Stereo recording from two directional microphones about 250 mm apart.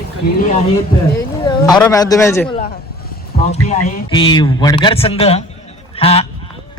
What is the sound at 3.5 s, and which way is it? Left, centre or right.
A man's voice, left.